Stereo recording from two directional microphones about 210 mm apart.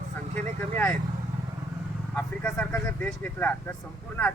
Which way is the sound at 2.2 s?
5° left (ahead or behind).